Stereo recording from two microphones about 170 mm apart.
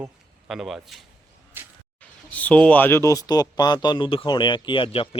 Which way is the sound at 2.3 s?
10° left (ahead or behind).